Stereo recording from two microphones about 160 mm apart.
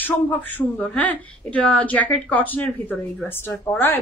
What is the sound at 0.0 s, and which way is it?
A man's voice, 10° left (ahead or behind).